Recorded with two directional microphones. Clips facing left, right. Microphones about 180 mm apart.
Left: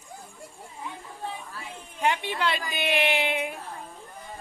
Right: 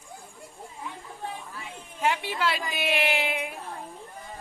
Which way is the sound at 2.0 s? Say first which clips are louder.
Even; centre (ahead or behind).